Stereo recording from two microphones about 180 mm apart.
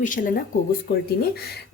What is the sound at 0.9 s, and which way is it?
Speech, 65° left (ahead or behind).